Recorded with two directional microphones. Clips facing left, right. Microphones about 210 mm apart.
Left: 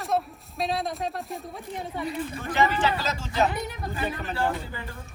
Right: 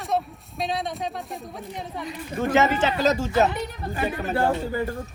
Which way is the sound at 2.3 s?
45° right (ahead or behind).